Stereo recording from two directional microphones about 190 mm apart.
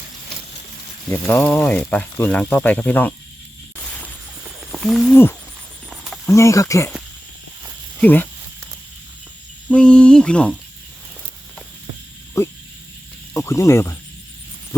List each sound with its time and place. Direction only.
1.1 s speech: 10° left (ahead or behind)
3.8 s a sound: 5° left (ahead or behind)
4.6 s wild animals: centre (ahead or behind)
5.1 s speech: 10° left (ahead or behind)
8.0 s speech: 10° left (ahead or behind)
9.6 s a sound: 5° left (ahead or behind)
13.3 s speech: 15° left (ahead or behind)